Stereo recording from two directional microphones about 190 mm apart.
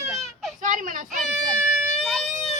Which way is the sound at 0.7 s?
45° right (ahead or behind).